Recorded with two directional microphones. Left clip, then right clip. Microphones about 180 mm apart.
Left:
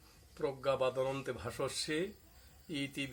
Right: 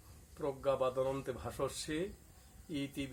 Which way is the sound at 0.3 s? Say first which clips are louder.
Left 1 dB; 15° left (ahead or behind).